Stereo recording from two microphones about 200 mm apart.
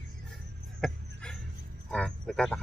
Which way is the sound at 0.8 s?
5° left (ahead or behind).